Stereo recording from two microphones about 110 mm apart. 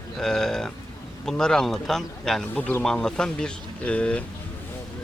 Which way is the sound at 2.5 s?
15° left (ahead or behind).